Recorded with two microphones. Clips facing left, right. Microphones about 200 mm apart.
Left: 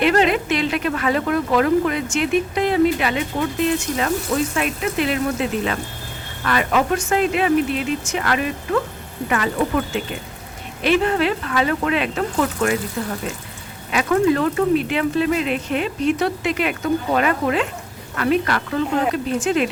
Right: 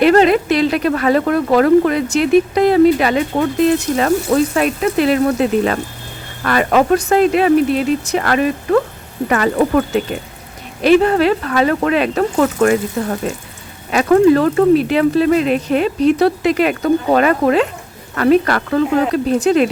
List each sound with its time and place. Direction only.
0.0 s speech: 40° right (ahead or behind)